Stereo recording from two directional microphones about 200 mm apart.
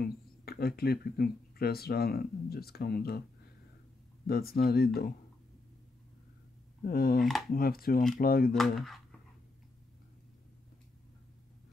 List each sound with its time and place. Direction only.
0.0 s speech: 50° left (ahead or behind)
4.3 s speech: 50° left (ahead or behind)
6.8 s speech: 50° left (ahead or behind)
8.5 s speech: centre (ahead or behind)